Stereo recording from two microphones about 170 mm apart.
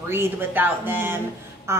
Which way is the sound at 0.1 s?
10° right (ahead or behind).